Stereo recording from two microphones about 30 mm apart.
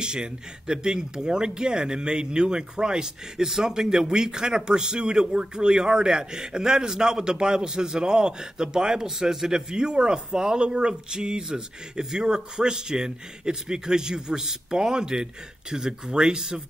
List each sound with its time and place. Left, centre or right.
0.0 s a man's voice: right
9.8 s a man's voice: right